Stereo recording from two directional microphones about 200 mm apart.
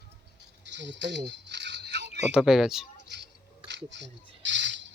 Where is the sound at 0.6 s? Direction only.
65° right (ahead or behind).